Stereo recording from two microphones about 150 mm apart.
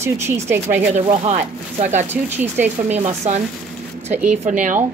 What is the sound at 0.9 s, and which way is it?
Speech, 55° right (ahead or behind).